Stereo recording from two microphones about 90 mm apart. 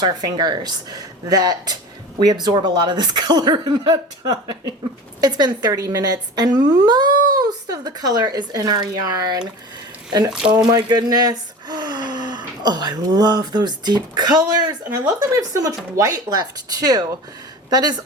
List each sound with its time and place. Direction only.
0.0 s a woman's voice: 50° right (ahead or behind)
5.2 s a woman's voice: 50° right (ahead or behind)
10.3 s speech: 10° right (ahead or behind)
10.7 s a woman's voice: 50° right (ahead or behind)